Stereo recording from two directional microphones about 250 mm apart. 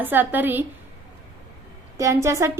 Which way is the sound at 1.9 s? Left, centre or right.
Centre.